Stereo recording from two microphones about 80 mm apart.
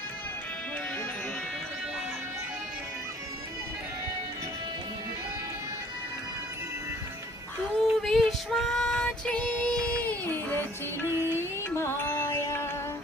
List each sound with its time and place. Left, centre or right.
7.8 s female singing: centre; by 10.7 s left
11.3 s music: left